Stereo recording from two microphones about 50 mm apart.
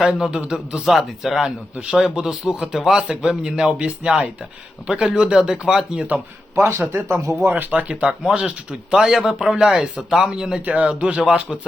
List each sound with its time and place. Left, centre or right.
0.0 s a man's voice: centre
3.1 s a man's voice: centre
3.7 s a man's voice: right
6.6 s speech: right
7.3 s speech: right
8.3 s a man's voice: centre